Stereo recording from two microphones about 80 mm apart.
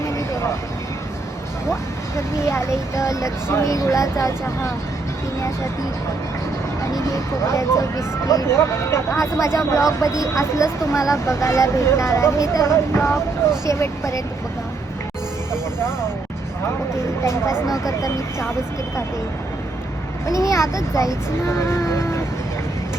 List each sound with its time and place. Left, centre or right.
1.7 s speech: left
6.9 s speech: left
17.7 s speech: left
20.2 s speech: left